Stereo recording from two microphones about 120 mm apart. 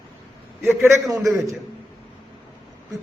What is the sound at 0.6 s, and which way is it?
Speech, 20° right (ahead or behind).